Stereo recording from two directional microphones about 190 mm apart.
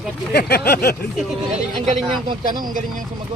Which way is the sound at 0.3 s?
60° left (ahead or behind).